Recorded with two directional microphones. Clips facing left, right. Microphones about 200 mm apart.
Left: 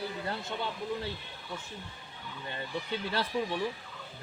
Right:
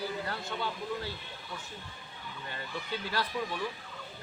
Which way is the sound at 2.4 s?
25° left (ahead or behind).